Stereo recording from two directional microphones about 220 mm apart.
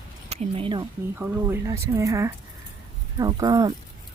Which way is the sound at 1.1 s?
10° right (ahead or behind).